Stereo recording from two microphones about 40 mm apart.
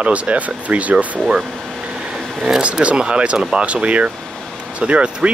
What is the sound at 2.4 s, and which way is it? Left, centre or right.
Speech, centre.